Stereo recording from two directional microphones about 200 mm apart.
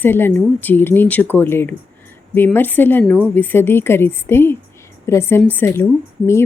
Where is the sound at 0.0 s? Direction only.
10° left (ahead or behind).